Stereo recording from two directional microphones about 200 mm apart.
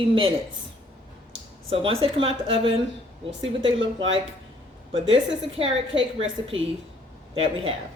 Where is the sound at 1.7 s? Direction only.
30° right (ahead or behind).